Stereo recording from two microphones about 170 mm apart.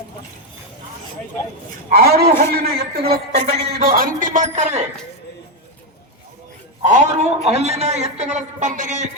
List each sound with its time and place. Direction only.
1.9 s a man's voice: 65° right (ahead or behind)
3.0 s a woman's voice: 35° right (ahead or behind)
3.7 s a man's voice: 60° right (ahead or behind)
6.8 s a man's voice: 45° right (ahead or behind)